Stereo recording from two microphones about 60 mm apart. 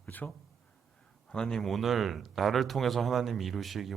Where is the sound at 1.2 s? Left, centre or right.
Centre.